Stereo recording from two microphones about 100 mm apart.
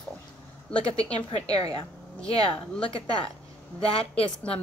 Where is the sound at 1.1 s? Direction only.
70° left (ahead or behind).